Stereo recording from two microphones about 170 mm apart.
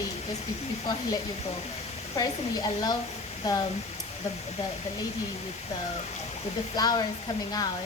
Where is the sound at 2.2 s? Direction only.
25° left (ahead or behind).